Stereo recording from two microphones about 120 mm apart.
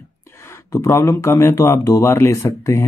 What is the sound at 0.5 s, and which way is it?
Speech, 25° left (ahead or behind).